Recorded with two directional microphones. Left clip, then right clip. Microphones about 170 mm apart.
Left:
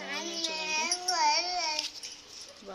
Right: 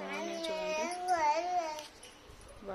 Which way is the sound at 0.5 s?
15° right (ahead or behind).